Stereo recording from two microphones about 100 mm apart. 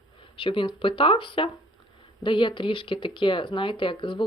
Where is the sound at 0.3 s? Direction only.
60° left (ahead or behind).